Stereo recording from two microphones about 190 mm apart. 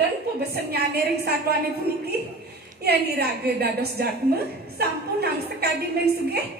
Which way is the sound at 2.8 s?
55° right (ahead or behind).